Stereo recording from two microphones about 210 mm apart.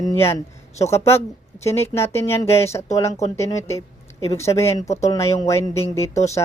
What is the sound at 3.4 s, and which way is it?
Speech, 15° left (ahead or behind).